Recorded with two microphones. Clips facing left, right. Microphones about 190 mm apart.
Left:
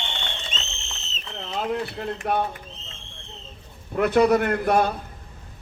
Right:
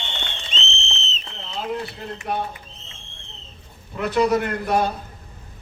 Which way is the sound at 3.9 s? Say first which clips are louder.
Left 2 dB; 55° left (ahead or behind).